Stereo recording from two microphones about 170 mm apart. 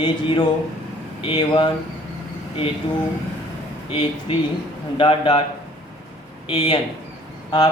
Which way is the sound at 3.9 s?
35° left (ahead or behind).